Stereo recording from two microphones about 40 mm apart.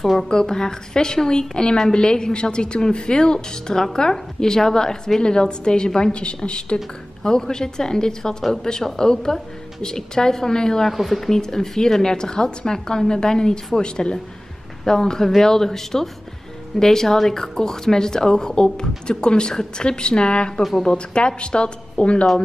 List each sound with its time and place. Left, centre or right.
0.0 s a woman's voice: centre
0.3 s a woman's voice: centre
10.9 s speech: centre; by 20.6 s left
20.6 s a woman's voice: centre; by 22.3 s left